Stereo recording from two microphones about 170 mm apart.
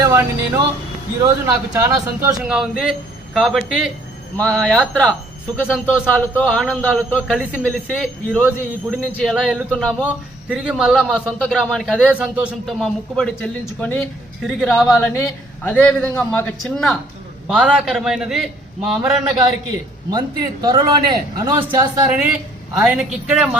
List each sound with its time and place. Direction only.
0.0 s speech: 15° right (ahead or behind)
2.4 s a man's voice: 5° right (ahead or behind)
20.1 s a man's voice: 25° right (ahead or behind)
22.8 s speech: 5° right (ahead or behind)